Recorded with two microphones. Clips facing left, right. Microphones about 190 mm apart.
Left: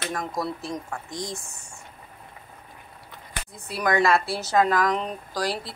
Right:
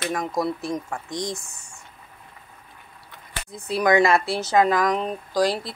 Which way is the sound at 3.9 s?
20° right (ahead or behind).